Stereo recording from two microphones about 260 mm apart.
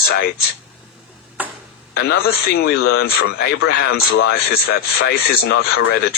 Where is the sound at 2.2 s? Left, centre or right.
Left.